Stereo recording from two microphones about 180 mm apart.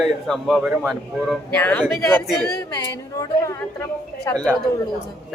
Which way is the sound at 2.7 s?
20° left (ahead or behind).